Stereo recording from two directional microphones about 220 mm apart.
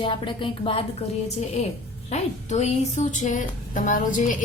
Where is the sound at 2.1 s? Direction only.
30° left (ahead or behind).